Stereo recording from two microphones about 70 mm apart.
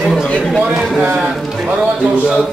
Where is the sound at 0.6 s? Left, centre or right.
Centre.